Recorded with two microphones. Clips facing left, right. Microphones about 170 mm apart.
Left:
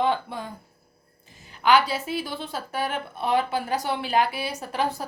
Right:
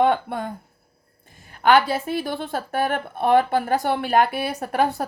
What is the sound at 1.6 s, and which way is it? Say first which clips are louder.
A woman's voice: right 3 dB; 50° right (ahead or behind).